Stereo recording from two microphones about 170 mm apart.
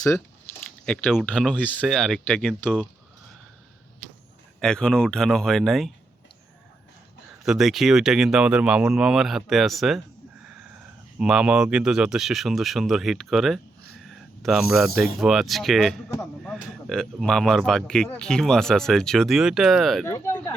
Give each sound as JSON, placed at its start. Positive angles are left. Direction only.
{"t": 0.9, "sound": "speech", "side_deg": 5}
{"t": 4.6, "sound": "speech", "side_deg": 5}
{"t": 7.4, "sound": "speech", "side_deg": 0}
{"t": 11.2, "sound": "speech", "side_deg": -5}
{"t": 20.1, "sound": "speech", "side_deg": 20}